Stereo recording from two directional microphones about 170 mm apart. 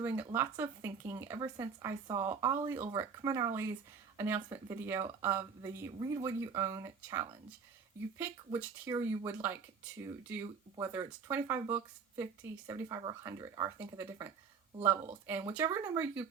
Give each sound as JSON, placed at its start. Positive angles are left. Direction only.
{"t": 0.0, "sound": "speech", "side_deg": -10}
{"t": 8.5, "sound": "speech", "side_deg": -15}
{"t": 15.5, "sound": "speech", "side_deg": -15}